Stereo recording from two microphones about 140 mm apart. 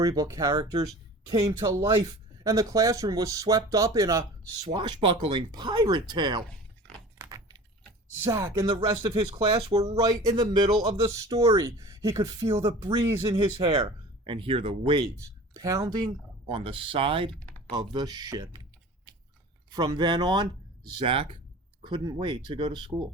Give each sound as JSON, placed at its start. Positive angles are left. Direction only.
{"t": 0.0, "sound": "speech", "side_deg": -25}
{"t": 7.2, "sound": "computer keyboard", "side_deg": -25}
{"t": 8.2, "sound": "speech", "side_deg": -25}
{"t": 10.0, "sound": "speech", "side_deg": -30}
{"t": 15.0, "sound": "speech", "side_deg": -25}
{"t": 19.7, "sound": "speech", "side_deg": -30}